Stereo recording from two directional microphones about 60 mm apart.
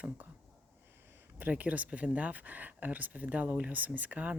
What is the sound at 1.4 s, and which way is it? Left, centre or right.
Speech, right.